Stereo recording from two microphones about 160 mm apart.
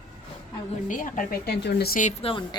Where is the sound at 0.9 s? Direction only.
55° left (ahead or behind); by 2.0 s 75° left (ahead or behind).